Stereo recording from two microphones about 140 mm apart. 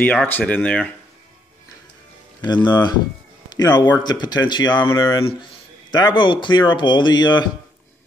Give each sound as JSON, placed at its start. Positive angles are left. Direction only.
{"t": 0.0, "sound": "speech", "side_deg": 10}
{"t": 2.4, "sound": "a man's voice", "side_deg": 30}
{"t": 5.2, "sound": "speech", "side_deg": 35}